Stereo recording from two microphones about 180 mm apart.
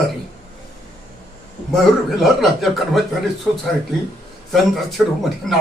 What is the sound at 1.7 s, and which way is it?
Speech, centre (ahead or behind).